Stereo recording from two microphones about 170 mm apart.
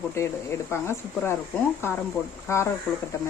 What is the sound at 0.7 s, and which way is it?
Speech, 15° left (ahead or behind).